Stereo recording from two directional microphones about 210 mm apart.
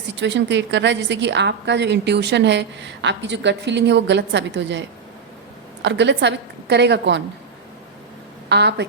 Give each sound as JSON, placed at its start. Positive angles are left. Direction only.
{"t": 0.2, "sound": "a woman's voice", "side_deg": -55}
{"t": 5.8, "sound": "a woman's voice", "side_deg": -55}
{"t": 8.4, "sound": "a woman's voice", "side_deg": -55}